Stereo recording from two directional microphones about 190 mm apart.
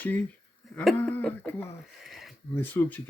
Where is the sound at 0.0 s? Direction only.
10° left (ahead or behind).